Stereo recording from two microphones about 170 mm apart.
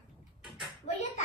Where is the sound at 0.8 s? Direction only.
45° left (ahead or behind).